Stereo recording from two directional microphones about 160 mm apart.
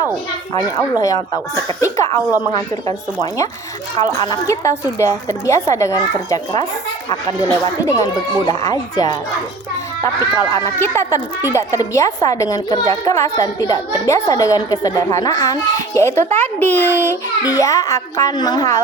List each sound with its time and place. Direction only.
0.5 s a woman's voice: 20° left (ahead or behind)
4.3 s a woman's voice: 20° left (ahead or behind)
7.9 s a woman's voice: 20° left (ahead or behind)